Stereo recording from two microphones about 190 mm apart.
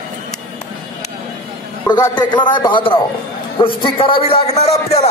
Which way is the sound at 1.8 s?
20° left (ahead or behind).